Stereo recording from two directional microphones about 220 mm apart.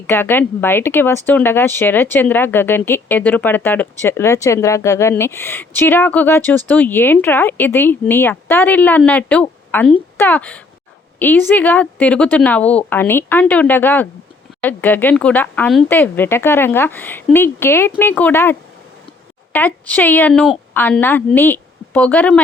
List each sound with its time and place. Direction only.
0.1 s speech: 10° left (ahead or behind)
19.5 s speech: 5° left (ahead or behind)